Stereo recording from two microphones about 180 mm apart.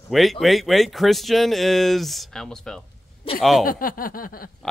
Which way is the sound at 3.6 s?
50° left (ahead or behind).